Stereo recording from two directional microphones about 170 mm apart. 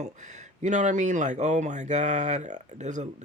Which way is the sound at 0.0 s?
45° right (ahead or behind).